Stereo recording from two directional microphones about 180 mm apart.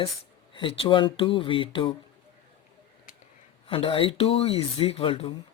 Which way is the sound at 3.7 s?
30° left (ahead or behind).